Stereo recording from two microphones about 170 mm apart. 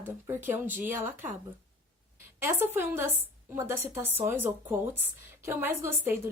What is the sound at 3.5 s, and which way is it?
A woman's voice, 15° right (ahead or behind).